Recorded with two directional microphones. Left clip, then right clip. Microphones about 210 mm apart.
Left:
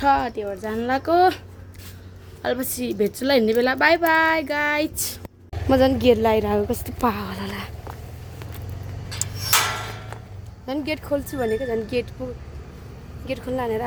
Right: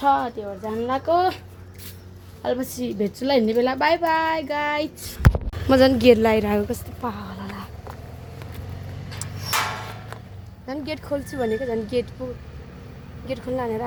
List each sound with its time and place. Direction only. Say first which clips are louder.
0.0 s speech: left 1 dB; 10° left (ahead or behind)
2.4 s a woman's voice: even; 5° left (ahead or behind)
7.0 s a sound: left 7 dB; 55° left (ahead or behind)
10.7 s a woman's voice: left 3 dB; centre (ahead or behind)
13.2 s a woman's voice: left 1 dB; 5° right (ahead or behind)